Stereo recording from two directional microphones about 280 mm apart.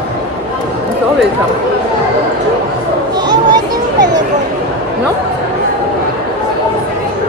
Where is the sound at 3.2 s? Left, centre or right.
Centre.